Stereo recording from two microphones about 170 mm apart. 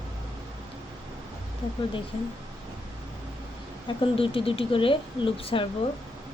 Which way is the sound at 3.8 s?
30° left (ahead or behind).